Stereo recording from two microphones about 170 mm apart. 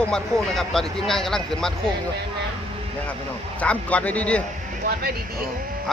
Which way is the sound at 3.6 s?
10° left (ahead or behind).